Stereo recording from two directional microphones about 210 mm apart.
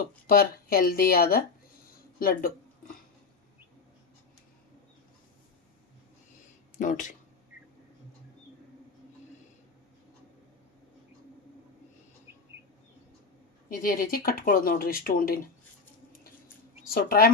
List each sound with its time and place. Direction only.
0.3 s speech: 45° left (ahead or behind)
2.1 s a sound: 45° left (ahead or behind)
6.7 s speech: 35° left (ahead or behind)
13.7 s speech: 40° left (ahead or behind)
16.9 s speech: 45° left (ahead or behind)